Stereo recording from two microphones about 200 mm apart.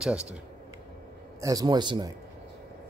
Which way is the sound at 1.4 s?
20° right (ahead or behind).